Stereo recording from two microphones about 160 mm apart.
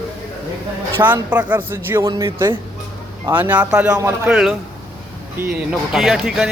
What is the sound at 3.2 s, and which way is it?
Speech, 10° right (ahead or behind).